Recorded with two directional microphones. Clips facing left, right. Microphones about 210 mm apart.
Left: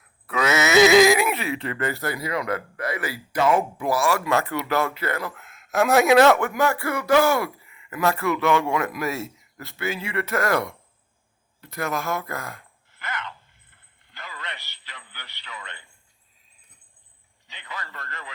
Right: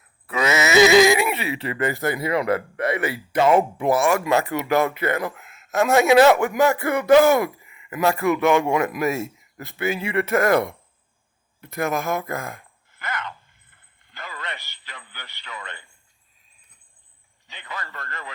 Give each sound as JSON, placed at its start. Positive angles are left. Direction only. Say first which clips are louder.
{"t": 0.3, "sound": "speech", "louder": "right 1 dB", "side_deg": 0}
{"t": 5.5, "sound": "a man's voice", "louder": "even", "side_deg": -5}
{"t": 13.0, "sound": "a sound", "louder": "right 3 dB", "side_deg": -45}
{"t": 17.5, "sound": "speech", "louder": "right 2 dB", "side_deg": -50}